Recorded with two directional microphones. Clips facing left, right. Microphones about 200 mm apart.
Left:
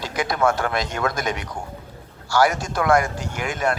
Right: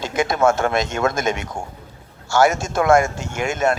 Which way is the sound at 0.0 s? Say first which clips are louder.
Right 4 dB; 25° right (ahead or behind).